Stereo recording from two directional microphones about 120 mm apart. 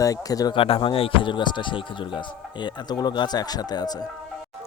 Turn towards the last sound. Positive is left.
turn(degrees=35)  # may be behind; listen again after turning